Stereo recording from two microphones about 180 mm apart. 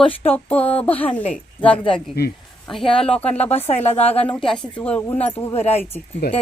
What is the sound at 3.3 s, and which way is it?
Speech, 35° left (ahead or behind).